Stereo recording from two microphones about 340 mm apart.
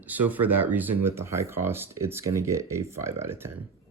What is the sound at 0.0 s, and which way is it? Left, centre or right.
Speech, centre.